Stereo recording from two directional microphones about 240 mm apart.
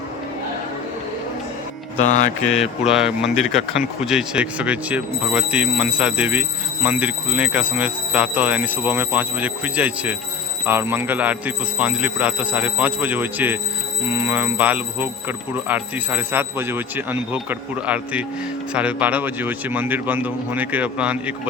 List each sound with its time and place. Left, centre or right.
2.0 s mantra: left
2.5 s speech: centre